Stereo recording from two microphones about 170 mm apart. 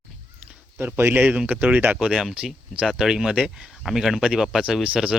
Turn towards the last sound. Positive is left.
turn(degrees=-5)  # may be behind; listen again after turning